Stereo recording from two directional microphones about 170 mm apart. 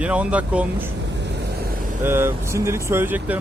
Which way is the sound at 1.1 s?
90° right.